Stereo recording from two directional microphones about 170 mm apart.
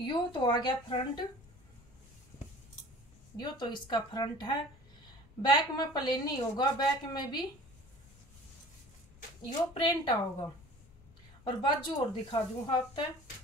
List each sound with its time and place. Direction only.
0.0 s a woman's voice: 25° left (ahead or behind)
3.3 s a woman's voice: 25° left (ahead or behind)
9.8 s a woman's voice: 25° left (ahead or behind)
11.4 s a woman's voice: 25° left (ahead or behind)